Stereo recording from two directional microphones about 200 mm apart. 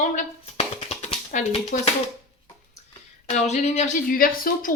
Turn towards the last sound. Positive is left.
turn(degrees=45)  # may be behind; listen again after turning